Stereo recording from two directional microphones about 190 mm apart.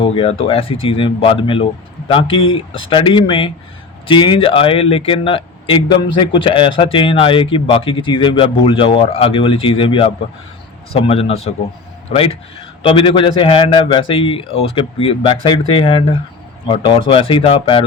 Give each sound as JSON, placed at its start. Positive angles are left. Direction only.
{"t": 0.0, "sound": "a man's voice", "side_deg": 30}